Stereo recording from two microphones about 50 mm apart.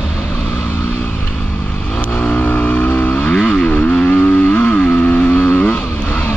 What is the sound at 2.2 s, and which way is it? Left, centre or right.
Vehicle, left.